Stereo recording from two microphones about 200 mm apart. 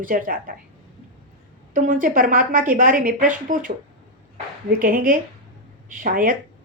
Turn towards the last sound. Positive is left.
turn(degrees=-45)  # may be behind; listen again after turning